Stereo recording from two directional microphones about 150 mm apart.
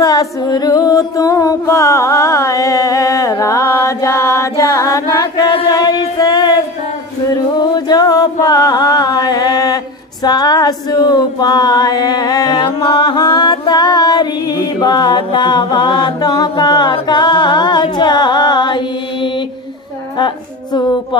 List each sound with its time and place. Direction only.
0.0 s music: 25° left (ahead or behind)
7.7 s a sound: 25° left (ahead or behind)
10.2 s female singing: 25° left (ahead or behind)
20.2 s speech: 30° left (ahead or behind)